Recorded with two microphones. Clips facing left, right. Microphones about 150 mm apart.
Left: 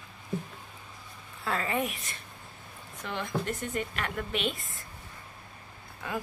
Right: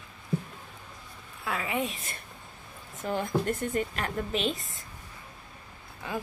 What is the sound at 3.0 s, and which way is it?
A woman's voice, 45° right (ahead or behind).